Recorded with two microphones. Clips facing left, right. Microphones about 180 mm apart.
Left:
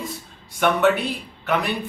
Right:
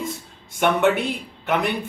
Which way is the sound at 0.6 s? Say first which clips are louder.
Even; 15° right (ahead or behind).